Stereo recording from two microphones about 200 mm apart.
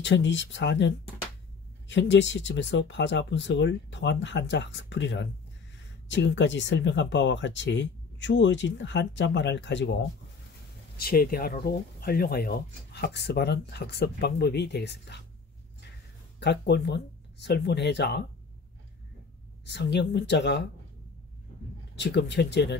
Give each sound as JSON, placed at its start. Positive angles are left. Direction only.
{"t": 0.0, "sound": "speech", "side_deg": 65}
{"t": 11.0, "sound": "speech", "side_deg": 50}
{"t": 16.3, "sound": "speech", "side_deg": 55}
{"t": 19.6, "sound": "speech", "side_deg": 60}
{"t": 21.9, "sound": "speech", "side_deg": 60}